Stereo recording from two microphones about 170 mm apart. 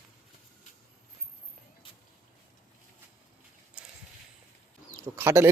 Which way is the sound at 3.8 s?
5° right (ahead or behind).